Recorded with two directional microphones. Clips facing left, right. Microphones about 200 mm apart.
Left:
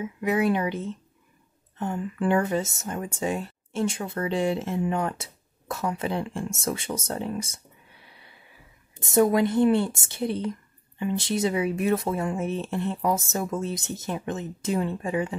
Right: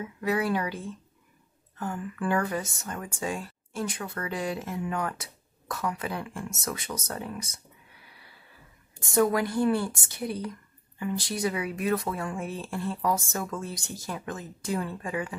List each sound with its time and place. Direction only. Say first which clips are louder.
0.0 s speech: left 4 dB; 20° left (ahead or behind)